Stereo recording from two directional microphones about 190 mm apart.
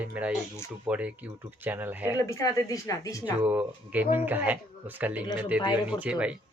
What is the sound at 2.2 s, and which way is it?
Speech, 15° left (ahead or behind).